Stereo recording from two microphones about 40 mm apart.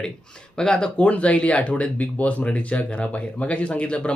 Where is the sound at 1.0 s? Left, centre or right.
Left.